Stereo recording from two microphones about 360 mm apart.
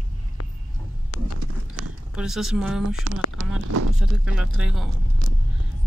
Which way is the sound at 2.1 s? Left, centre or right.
Centre.